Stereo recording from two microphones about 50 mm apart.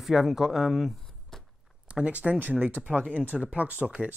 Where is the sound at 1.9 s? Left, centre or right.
Right.